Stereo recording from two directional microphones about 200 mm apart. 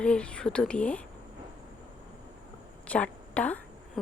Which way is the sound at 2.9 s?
5° left (ahead or behind).